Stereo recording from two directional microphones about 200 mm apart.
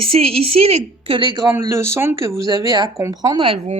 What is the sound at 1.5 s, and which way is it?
Speech, 10° right (ahead or behind).